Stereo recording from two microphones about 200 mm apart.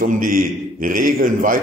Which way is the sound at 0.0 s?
45° right (ahead or behind).